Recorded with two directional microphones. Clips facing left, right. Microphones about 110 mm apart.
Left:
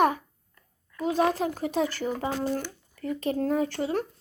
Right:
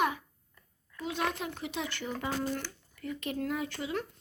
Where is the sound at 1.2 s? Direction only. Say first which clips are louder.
Left 9 dB; 35° left (ahead or behind).